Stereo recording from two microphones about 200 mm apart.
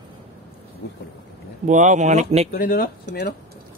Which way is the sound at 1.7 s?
35° right (ahead or behind).